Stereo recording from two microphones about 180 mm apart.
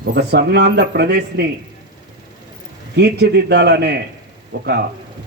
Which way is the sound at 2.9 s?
65° right (ahead or behind).